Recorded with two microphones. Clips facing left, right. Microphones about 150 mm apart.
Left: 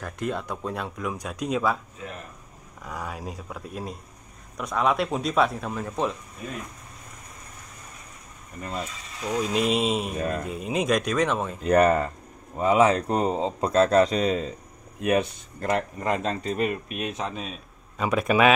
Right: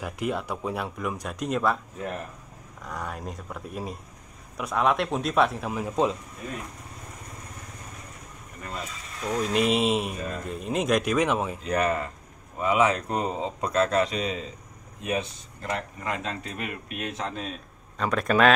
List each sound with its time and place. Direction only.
0.0 s speech: 5° right (ahead or behind)
2.8 s speech: 5° left (ahead or behind); by 6.1 s 15° right (ahead or behind)
9.2 s speech: centre (ahead or behind)
10.1 s speech: 55° left (ahead or behind)
10.4 s speech: 5° left (ahead or behind)
11.6 s speech: 45° left (ahead or behind)
12.5 s speech: 30° left (ahead or behind)
15.0 s speech: 60° left (ahead or behind)
16.0 s speech: 40° left (ahead or behind); by 17.3 s 20° left (ahead or behind)
17.9 s speech: 10° left (ahead or behind)